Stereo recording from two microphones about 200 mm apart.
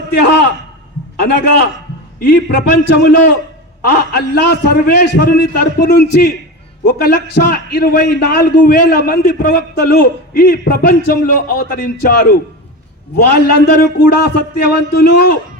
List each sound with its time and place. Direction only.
0.1 s a man's voice: 55° left (ahead or behind)
2.5 s a man's voice: 50° left (ahead or behind)